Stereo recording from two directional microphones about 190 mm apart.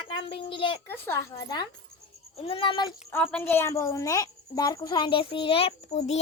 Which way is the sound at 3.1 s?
10° left (ahead or behind).